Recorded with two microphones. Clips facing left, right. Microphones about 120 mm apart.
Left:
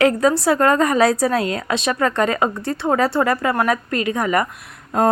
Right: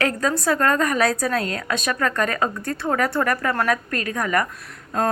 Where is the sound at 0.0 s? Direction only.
20° left (ahead or behind).